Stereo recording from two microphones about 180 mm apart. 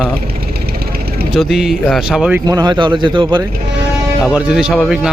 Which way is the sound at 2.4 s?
20° right (ahead or behind).